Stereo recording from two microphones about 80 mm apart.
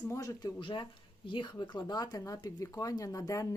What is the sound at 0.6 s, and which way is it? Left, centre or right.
Speech, left.